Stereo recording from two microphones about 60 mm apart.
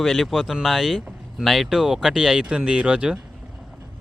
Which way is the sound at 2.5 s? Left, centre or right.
Centre.